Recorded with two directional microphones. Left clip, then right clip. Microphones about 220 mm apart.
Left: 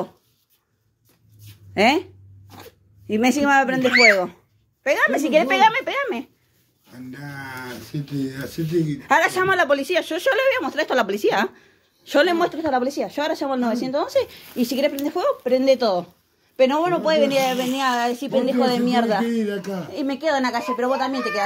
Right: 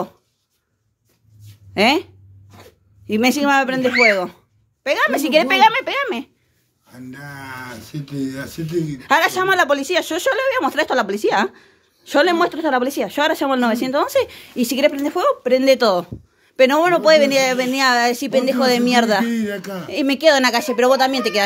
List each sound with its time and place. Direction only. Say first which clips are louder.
1.7 s speech: right 2 dB; 15° right (ahead or behind)
3.1 s a woman's voice: right 2 dB; 15° right (ahead or behind)
10.3 s speech: left 1 dB; 5° right (ahead or behind)
10.6 s a woman's voice: right 5 dB; 30° right (ahead or behind)
10.9 s a woman's voice: right 2 dB; 10° right (ahead or behind); by 19.2 s 40° right (ahead or behind)
19.2 s a woman's voice: right 1 dB; 25° right (ahead or behind)
19.9 s speech: right 8 dB; 45° right (ahead or behind)